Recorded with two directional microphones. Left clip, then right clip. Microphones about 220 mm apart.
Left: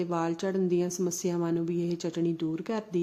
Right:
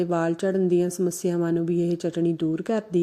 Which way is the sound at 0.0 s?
20° right (ahead or behind).